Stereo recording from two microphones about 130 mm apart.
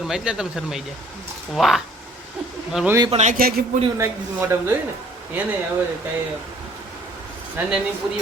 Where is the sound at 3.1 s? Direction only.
65° right (ahead or behind).